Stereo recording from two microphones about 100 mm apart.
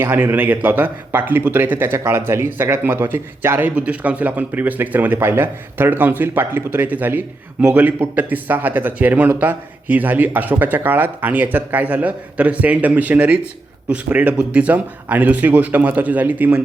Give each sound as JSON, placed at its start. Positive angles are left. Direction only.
{"t": 0.0, "sound": "a man's voice", "side_deg": -20}